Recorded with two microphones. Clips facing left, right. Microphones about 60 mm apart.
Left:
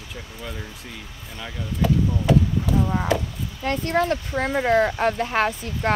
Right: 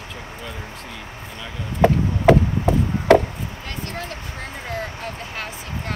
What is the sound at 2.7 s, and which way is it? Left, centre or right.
Chop, right.